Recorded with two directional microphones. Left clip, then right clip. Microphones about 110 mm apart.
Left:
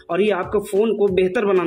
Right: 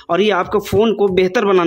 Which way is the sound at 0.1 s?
40° right (ahead or behind).